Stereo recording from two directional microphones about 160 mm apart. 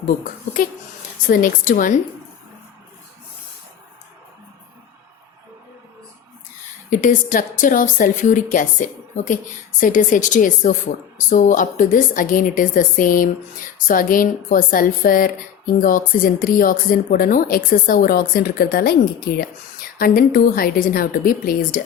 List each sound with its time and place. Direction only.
0.3 s speech: 60° left (ahead or behind)
7.0 s a woman's voice: 55° left (ahead or behind); by 18.9 s 70° left (ahead or behind)
20.0 s speech: 65° left (ahead or behind)